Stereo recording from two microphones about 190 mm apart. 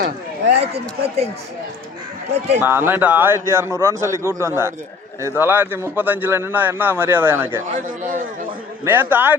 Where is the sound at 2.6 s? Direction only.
10° right (ahead or behind).